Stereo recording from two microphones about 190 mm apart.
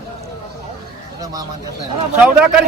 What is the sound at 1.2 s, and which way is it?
Speech, 20° right (ahead or behind).